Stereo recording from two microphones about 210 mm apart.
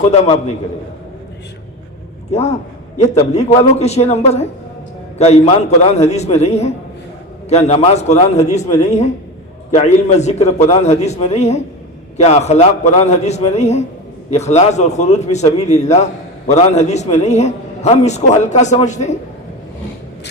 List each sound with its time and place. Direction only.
0.0 s a man's voice: 30° left (ahead or behind)
2.3 s a man's voice: 30° left (ahead or behind)